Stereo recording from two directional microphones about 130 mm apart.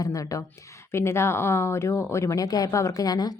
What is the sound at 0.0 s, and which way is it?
A woman's voice, 25° left (ahead or behind).